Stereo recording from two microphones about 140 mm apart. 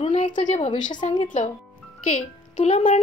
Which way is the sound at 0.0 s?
55° left (ahead or behind).